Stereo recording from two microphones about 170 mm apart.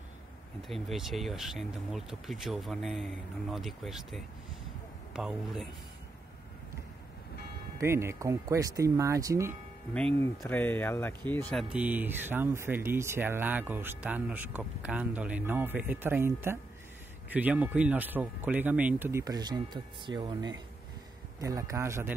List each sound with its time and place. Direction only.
0.6 s speech: centre (ahead or behind)
7.8 s speech: 15° right (ahead or behind)
9.9 s speech: 10° left (ahead or behind)
11.7 s speech: 10° right (ahead or behind)